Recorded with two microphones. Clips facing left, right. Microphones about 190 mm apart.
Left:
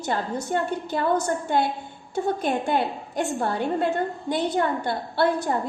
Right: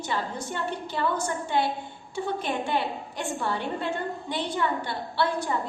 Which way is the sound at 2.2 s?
45° left (ahead or behind).